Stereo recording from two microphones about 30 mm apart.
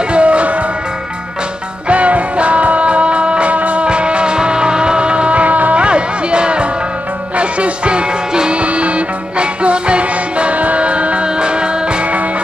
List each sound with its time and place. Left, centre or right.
0.1 s music: right
1.9 s music: right
3.5 s music: right
3.8 s music: right
5.8 s music: right
8.5 s music: right
11.2 s music: right